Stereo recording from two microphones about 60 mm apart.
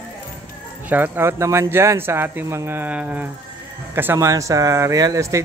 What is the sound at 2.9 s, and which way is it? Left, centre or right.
Speech, right.